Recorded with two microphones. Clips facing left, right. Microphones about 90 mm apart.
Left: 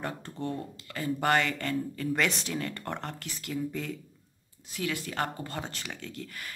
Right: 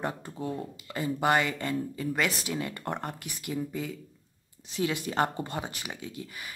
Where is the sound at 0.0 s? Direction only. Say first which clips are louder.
Right 1 dB; 10° right (ahead or behind).